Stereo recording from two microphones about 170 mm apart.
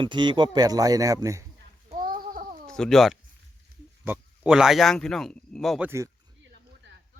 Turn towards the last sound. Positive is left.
turn(degrees=0)  # may be behind; listen again after turning